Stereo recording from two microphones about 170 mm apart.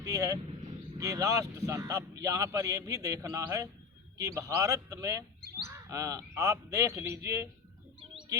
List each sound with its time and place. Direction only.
0.0 s speech: 20° right (ahead or behind)